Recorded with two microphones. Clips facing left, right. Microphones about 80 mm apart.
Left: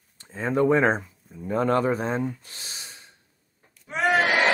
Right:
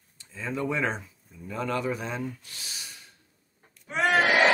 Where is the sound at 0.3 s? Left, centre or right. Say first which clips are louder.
Left 9 dB; left.